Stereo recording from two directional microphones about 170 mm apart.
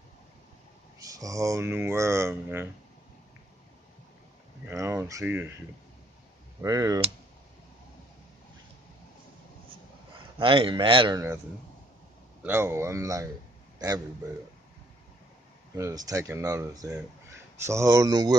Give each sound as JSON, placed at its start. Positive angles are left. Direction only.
{"t": 0.9, "sound": "speech", "side_deg": -20}
{"t": 4.6, "sound": "speech", "side_deg": -15}
{"t": 6.6, "sound": "speech", "side_deg": -20}
{"t": 10.4, "sound": "speech", "side_deg": -30}
{"t": 12.4, "sound": "a man's voice", "side_deg": -15}
{"t": 15.7, "sound": "speech", "side_deg": -20}